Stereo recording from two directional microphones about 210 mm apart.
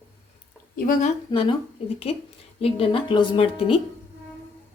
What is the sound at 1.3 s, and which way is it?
Speech, 25° left (ahead or behind).